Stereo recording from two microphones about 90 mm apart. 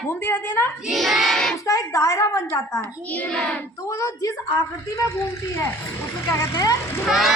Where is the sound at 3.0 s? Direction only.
20° left (ahead or behind).